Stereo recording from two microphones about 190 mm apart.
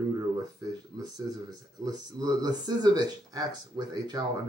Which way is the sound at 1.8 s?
20° right (ahead or behind).